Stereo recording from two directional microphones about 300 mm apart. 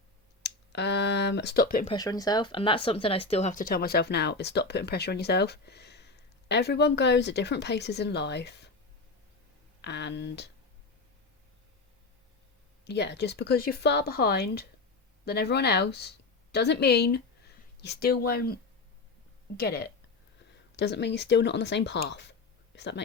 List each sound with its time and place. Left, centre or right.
0.4 s a sound: left
1.9 s speech: centre; by 8.7 s left
9.8 s speech: left
12.8 s a woman's voice: left